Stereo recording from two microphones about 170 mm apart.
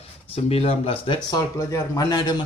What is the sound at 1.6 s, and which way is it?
Speech, 20° left (ahead or behind).